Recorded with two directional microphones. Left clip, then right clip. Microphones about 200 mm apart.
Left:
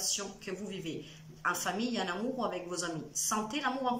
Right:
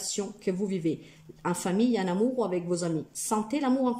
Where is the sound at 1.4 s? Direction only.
40° right (ahead or behind).